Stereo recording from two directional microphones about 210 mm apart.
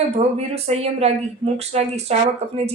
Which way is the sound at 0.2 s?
30° right (ahead or behind).